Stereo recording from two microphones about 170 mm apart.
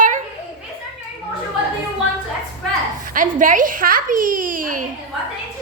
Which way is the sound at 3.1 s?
50° right (ahead or behind).